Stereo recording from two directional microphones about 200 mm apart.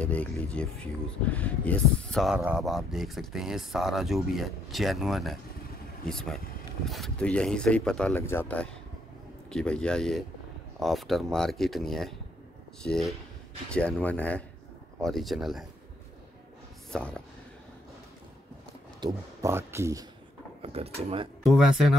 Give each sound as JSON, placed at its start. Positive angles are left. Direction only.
{"t": 0.0, "sound": "speech", "side_deg": 5}
{"t": 16.9, "sound": "speech", "side_deg": 5}
{"t": 18.9, "sound": "speech", "side_deg": -15}
{"t": 20.6, "sound": "speech", "side_deg": -30}
{"t": 21.5, "sound": "speech", "side_deg": 0}